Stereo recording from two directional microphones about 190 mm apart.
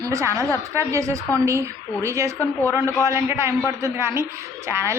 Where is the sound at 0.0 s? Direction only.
15° right (ahead or behind).